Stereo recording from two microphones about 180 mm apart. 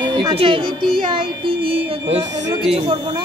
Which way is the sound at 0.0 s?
25° right (ahead or behind).